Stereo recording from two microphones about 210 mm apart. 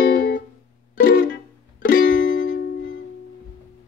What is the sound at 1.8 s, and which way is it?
Music, 40° left (ahead or behind).